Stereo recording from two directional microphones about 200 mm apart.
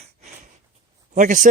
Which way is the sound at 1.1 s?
40° right (ahead or behind).